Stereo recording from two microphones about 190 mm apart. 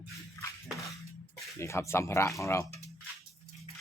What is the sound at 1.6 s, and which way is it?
A man's voice, 15° left (ahead or behind).